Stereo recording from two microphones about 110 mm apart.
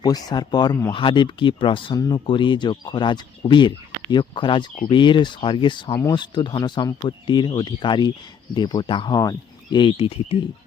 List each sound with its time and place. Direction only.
0.0 s speech: 35° left (ahead or behind); by 10.3 s 50° left (ahead or behind)